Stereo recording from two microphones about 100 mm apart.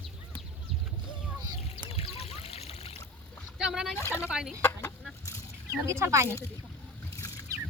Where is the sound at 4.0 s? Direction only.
30° left (ahead or behind).